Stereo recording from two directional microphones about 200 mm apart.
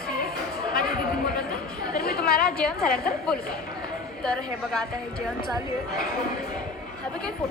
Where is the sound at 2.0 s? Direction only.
50° left (ahead or behind).